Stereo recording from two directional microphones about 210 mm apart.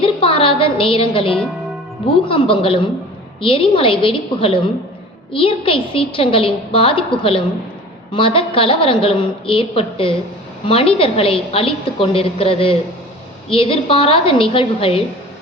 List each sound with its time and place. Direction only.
0.0 s a sound: 25° left (ahead or behind)
1.1 s a woman's voice: 25° left (ahead or behind)
1.4 s music: centre (ahead or behind)
2.2 s a woman's voice: 25° left (ahead or behind)